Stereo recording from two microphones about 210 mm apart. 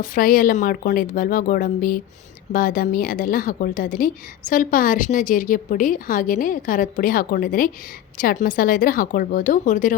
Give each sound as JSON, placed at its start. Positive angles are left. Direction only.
{"t": 0.0, "sound": "a woman's voice", "side_deg": 40}